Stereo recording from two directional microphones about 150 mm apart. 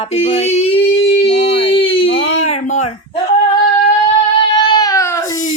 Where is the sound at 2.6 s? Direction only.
50° left (ahead or behind).